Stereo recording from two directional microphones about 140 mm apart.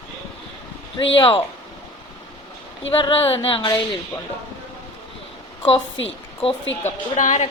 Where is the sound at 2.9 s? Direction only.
40° left (ahead or behind).